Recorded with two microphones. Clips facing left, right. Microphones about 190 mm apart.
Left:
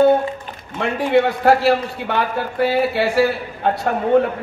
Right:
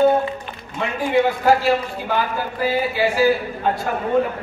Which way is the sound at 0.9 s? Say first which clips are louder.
Left 2 dB; 70° left (ahead or behind).